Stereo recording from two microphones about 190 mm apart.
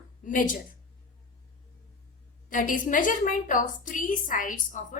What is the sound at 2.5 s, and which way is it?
A woman's voice, 45° left (ahead or behind).